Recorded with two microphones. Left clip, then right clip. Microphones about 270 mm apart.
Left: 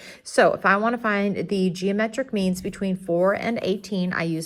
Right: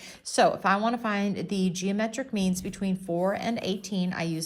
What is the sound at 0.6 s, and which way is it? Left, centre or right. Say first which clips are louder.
A woman's voice: left 5 dB; left.